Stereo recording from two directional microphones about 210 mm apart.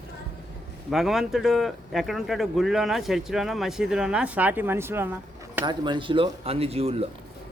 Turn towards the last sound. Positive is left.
turn(degrees=-30)  # may be behind; listen again after turning